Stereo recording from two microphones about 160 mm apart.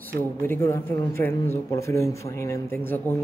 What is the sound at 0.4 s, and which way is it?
Speech, 15° left (ahead or behind).